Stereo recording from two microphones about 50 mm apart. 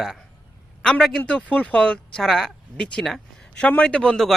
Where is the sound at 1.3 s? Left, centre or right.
Left.